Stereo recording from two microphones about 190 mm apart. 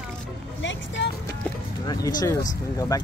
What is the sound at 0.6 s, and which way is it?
Vehicle, 70° left (ahead or behind).